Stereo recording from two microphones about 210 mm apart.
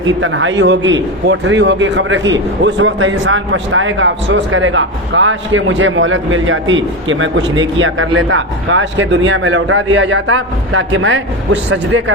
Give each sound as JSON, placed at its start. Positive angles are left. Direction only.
{"t": 0.0, "sound": "a man's voice", "side_deg": -70}